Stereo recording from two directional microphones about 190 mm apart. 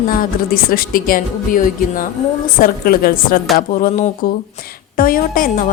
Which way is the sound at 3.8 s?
40° left (ahead or behind).